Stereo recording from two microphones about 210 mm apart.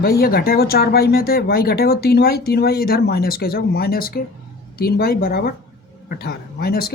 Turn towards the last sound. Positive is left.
turn(degrees=45)  # may be behind; listen again after turning